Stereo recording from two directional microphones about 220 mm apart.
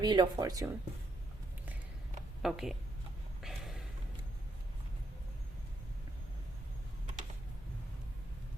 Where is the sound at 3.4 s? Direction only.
Centre (ahead or behind).